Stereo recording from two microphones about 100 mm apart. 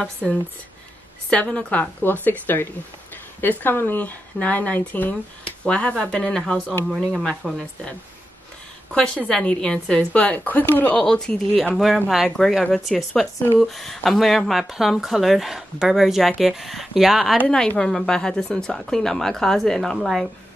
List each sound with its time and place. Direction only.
1.3 s a woman's voice: 10° left (ahead or behind)
8.9 s a woman's voice: 5° left (ahead or behind)